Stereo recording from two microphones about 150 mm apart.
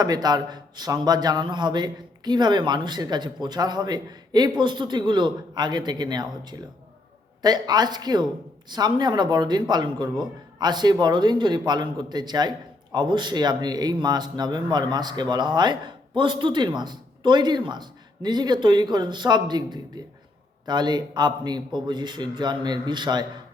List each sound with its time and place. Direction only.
0.0 s a man's voice: 25° right (ahead or behind)